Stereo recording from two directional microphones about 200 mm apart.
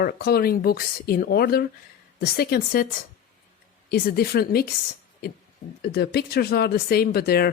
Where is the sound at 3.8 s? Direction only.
50° left (ahead or behind).